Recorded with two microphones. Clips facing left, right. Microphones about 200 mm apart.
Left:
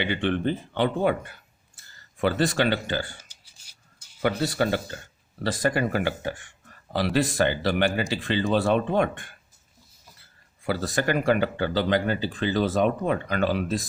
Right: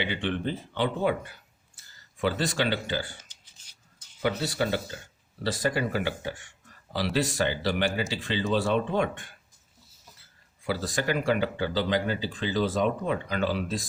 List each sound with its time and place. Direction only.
0.0 s speech: 55° left (ahead or behind)
3.2 s a sound: 10° left (ahead or behind)
4.2 s speech: 50° left (ahead or behind)